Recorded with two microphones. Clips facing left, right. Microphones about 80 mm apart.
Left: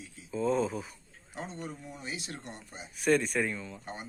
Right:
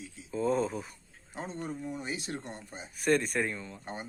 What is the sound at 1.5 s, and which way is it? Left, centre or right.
Speech, right.